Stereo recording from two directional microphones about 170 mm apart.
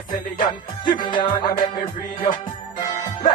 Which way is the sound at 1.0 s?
25° left (ahead or behind).